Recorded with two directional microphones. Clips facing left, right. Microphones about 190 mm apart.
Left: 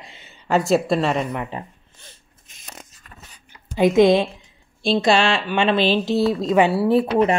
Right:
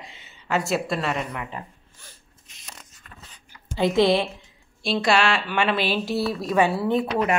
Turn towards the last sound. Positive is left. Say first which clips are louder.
# left 5 dB
turn(degrees=30)  # may be behind; listen again after turning